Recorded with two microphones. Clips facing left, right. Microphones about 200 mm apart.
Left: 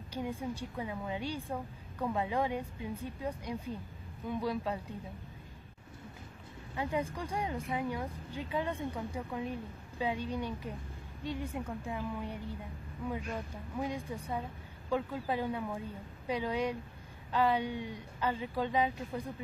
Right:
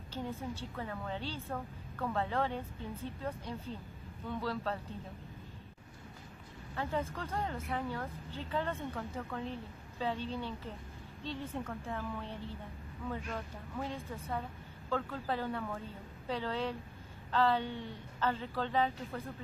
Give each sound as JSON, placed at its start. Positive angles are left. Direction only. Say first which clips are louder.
{"t": 0.1, "sound": "speech", "louder": "left 3 dB", "side_deg": 15}
{"t": 6.7, "sound": "speech", "louder": "left 2 dB", "side_deg": 15}